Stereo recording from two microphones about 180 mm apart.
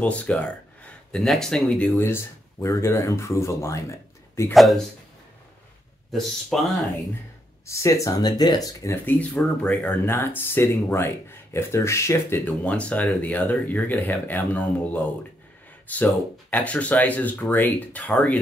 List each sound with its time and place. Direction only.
0.0 s speech: 5° left (ahead or behind)
6.1 s speech: centre (ahead or behind)
7.6 s speech: 15° left (ahead or behind)